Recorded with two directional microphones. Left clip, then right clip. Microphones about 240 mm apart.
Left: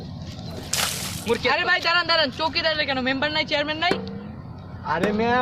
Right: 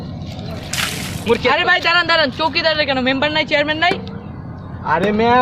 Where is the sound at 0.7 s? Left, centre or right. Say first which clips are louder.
Right 4 dB; centre.